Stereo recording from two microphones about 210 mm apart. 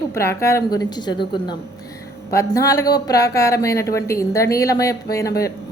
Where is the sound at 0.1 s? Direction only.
15° left (ahead or behind).